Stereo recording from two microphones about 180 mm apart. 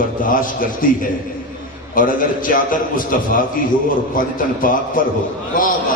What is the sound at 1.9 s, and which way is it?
A man's voice, 50° left (ahead or behind).